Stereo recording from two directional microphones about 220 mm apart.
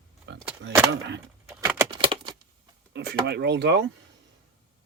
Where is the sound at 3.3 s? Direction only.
50° right (ahead or behind).